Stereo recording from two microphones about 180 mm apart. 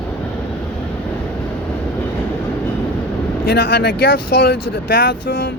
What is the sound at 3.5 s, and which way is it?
Speech, 70° left (ahead or behind).